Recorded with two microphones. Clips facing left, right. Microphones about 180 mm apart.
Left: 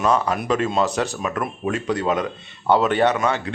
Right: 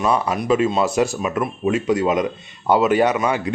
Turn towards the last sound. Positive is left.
turn(degrees=-10)  # may be behind; listen again after turning